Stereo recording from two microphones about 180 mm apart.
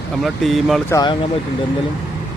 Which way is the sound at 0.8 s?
20° left (ahead or behind).